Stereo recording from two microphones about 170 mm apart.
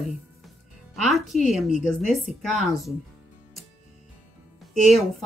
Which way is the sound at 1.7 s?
45° left (ahead or behind).